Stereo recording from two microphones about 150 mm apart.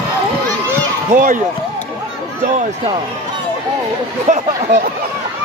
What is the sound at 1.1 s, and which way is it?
Speech, 65° right (ahead or behind).